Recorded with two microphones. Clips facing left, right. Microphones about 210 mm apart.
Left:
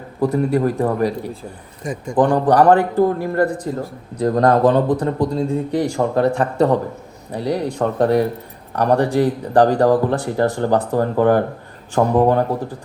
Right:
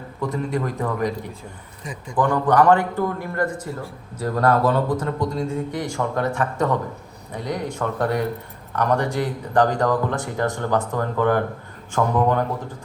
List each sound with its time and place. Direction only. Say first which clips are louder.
0.5 s a man's voice: left 7 dB; 35° left (ahead or behind)
1.8 s speech: left 7 dB; 45° left (ahead or behind)
2.2 s a man's voice: left 3 dB; 35° left (ahead or behind)